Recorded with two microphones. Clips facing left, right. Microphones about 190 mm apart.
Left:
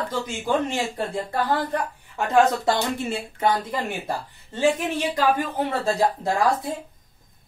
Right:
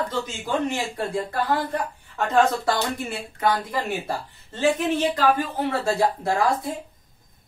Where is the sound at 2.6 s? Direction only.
25° left (ahead or behind).